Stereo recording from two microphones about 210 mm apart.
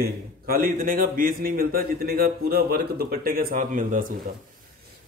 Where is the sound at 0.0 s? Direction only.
45° right (ahead or behind).